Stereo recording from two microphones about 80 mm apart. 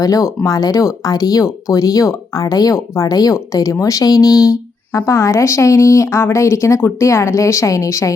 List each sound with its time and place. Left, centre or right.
0.0 s speech: left